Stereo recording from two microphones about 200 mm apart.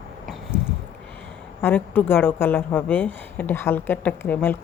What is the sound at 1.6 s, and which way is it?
A woman's voice, 10° left (ahead or behind).